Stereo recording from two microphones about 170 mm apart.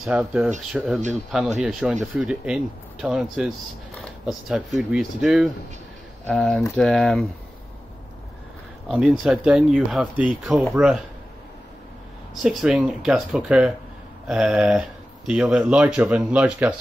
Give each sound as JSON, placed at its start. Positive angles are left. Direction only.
{"t": 0.0, "sound": "speech", "side_deg": -5}
{"t": 8.8, "sound": "speech", "side_deg": -5}
{"t": 12.4, "sound": "speech", "side_deg": -5}